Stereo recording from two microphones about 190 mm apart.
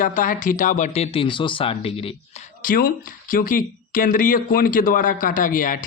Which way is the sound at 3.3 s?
45° left (ahead or behind).